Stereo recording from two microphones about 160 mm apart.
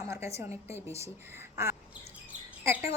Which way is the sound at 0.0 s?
15° right (ahead or behind).